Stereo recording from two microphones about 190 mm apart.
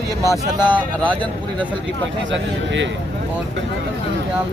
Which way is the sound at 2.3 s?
75° right (ahead or behind).